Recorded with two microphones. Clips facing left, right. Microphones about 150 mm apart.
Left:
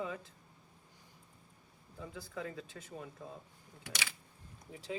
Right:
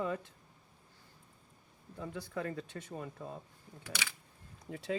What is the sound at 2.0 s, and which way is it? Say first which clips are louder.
Speech: right 4 dB; 65° right (ahead or behind).